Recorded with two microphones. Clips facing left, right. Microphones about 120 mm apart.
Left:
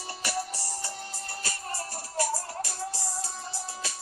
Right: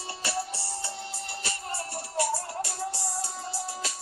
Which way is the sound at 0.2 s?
30° right (ahead or behind).